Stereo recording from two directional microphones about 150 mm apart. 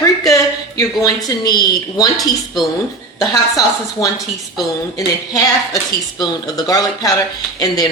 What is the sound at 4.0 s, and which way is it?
Speech, 20° left (ahead or behind).